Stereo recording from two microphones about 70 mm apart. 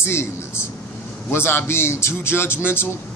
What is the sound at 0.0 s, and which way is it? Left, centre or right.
Speech, left.